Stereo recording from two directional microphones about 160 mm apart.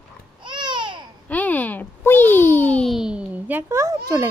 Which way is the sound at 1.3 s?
10° left (ahead or behind).